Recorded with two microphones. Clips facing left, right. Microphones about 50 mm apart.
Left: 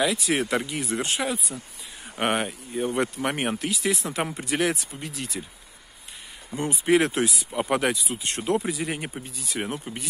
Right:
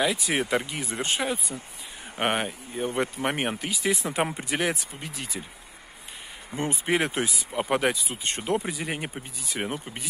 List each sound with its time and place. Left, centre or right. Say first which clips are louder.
0.0 s speech: left 1 dB; centre
2.8 s speech: left 3 dB; centre
3.3 s speech: left 1 dB; centre
4.1 s speech: right 1 dB; centre
6.5 s speech: left 1 dB; right
7.2 s speech: left 1 dB; centre